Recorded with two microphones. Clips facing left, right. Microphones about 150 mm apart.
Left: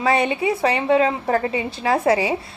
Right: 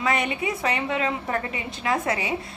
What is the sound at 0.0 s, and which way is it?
A woman's voice, 30° left (ahead or behind).